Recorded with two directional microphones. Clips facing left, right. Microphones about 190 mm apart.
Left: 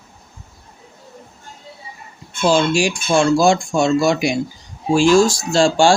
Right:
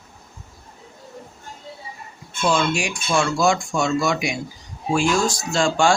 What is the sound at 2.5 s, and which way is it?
Speech, 30° left (ahead or behind).